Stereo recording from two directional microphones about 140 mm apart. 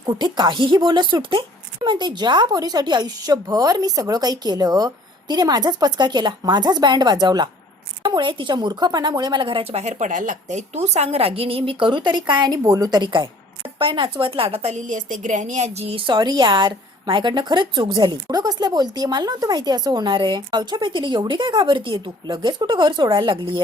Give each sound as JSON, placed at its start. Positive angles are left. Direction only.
{"t": 0.0, "sound": "speech", "side_deg": -30}
{"t": 10.8, "sound": "speech", "side_deg": -50}